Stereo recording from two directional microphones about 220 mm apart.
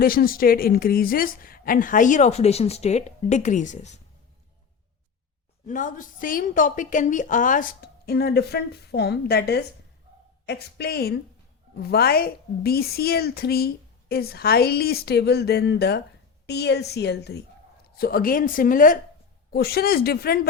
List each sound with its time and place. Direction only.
0.0 s a woman's voice: 40° left (ahead or behind)
5.6 s a woman's voice: 35° left (ahead or behind)